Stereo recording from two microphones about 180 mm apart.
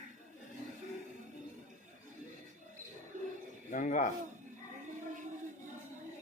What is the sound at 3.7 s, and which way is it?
Speech, 45° left (ahead or behind).